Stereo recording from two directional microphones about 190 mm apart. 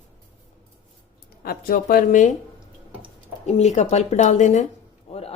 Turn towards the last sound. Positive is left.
turn(degrees=30)  # may be behind; listen again after turning